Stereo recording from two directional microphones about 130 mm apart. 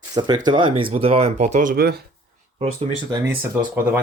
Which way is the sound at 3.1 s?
20° right (ahead or behind).